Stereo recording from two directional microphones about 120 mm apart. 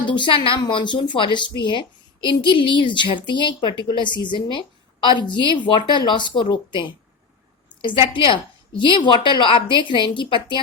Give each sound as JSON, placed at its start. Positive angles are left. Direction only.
{"t": 0.0, "sound": "a woman's voice", "side_deg": 40}